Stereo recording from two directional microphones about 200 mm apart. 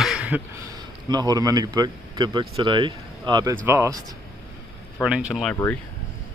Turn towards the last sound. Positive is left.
turn(degrees=0)  # may be behind; listen again after turning